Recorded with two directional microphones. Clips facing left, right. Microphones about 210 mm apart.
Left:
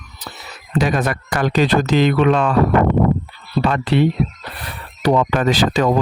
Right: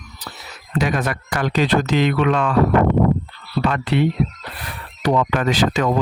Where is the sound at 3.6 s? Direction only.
30° left (ahead or behind).